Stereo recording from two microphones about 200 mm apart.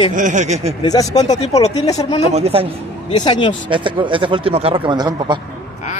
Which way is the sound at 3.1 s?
25° left (ahead or behind).